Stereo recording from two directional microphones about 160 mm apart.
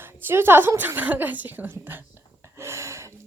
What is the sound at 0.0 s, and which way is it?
Speech, 15° right (ahead or behind).